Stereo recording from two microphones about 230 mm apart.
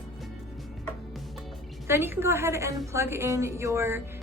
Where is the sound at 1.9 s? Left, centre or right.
Centre.